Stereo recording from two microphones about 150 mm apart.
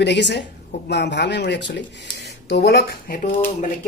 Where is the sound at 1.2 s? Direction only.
90° left.